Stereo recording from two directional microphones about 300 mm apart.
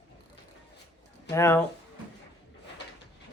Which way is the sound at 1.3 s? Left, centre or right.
Centre.